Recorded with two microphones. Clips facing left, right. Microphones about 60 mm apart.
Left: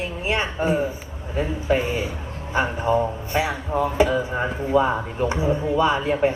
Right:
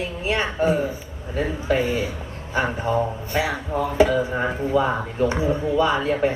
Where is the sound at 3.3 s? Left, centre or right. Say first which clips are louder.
Even; left.